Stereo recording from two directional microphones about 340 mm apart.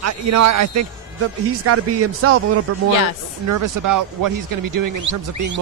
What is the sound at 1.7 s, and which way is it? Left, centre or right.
Speech, right.